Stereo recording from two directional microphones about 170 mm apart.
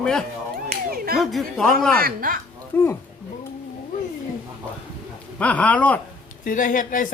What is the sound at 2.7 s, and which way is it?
Speech, 10° left (ahead or behind).